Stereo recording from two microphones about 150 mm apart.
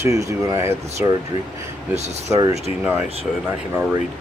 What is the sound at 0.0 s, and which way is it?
Speech, 20° right (ahead or behind).